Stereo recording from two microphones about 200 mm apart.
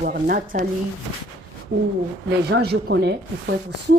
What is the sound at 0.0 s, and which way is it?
Speech, 45° right (ahead or behind).